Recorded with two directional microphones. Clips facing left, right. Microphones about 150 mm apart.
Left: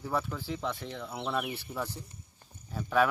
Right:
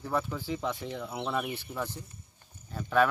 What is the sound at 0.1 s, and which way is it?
Speech, centre (ahead or behind).